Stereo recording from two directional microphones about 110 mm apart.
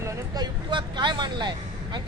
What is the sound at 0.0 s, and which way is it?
Speech, 40° right (ahead or behind).